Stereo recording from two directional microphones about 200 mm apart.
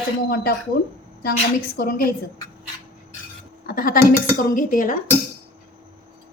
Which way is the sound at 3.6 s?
50° left (ahead or behind).